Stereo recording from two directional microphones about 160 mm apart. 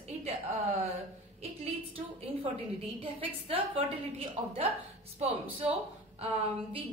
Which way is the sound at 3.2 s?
35° right (ahead or behind).